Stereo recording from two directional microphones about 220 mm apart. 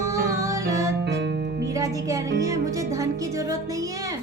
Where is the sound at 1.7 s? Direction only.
15° right (ahead or behind).